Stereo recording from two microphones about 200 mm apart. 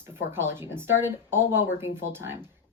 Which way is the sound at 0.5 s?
10° right (ahead or behind).